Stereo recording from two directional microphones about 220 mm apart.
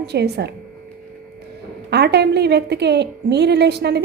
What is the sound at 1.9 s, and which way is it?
A woman's voice, 50° right (ahead or behind).